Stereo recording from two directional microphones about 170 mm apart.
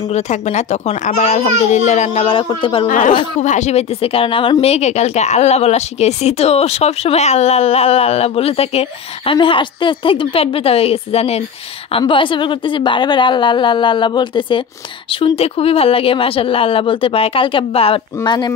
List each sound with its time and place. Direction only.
0.1 s a woman's voice: 45° left (ahead or behind)
3.4 s a woman's voice: 45° left (ahead or behind); by 18.5 s 25° left (ahead or behind)